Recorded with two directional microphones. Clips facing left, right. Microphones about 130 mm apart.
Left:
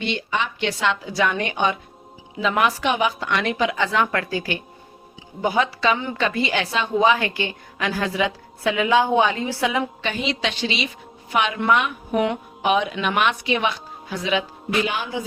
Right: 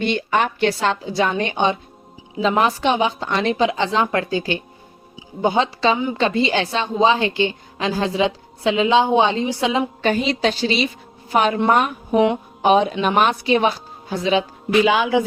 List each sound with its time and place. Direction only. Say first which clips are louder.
0.0 s a woman's voice: right 5 dB; 50° right (ahead or behind)
0.7 s a woman's voice: right 3 dB; 35° right (ahead or behind)
10.0 s a woman's voice: right 6 dB; 40° right (ahead or behind)
12.1 s a woman's voice: right 5 dB; 20° right (ahead or behind)
12.6 s a woman's voice: right 5 dB; 35° right (ahead or behind)
14.8 s a man's voice: right 10 dB; 90° right